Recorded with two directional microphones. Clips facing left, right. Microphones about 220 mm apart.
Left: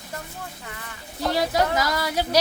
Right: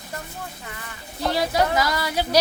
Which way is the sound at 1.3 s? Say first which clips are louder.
Right 1 dB; 45° left (ahead or behind).